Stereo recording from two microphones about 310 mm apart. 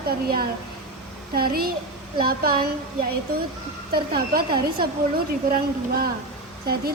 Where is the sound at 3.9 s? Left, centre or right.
Right.